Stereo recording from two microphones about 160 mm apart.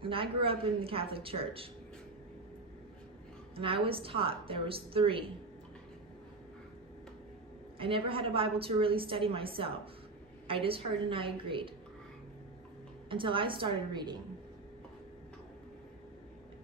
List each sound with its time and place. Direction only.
0.0 s a woman's voice: 35° right (ahead or behind)
3.5 s a woman's voice: 35° right (ahead or behind)
7.8 s a woman's voice: 35° right (ahead or behind)
13.1 s a woman's voice: 30° right (ahead or behind)